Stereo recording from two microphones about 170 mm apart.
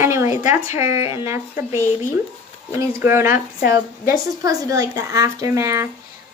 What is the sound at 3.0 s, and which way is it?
Speech, 15° right (ahead or behind).